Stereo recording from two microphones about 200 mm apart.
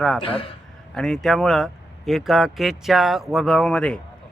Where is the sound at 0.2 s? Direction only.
25° left (ahead or behind).